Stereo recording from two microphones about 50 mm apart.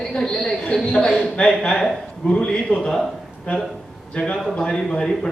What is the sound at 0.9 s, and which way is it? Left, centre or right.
Speech, centre.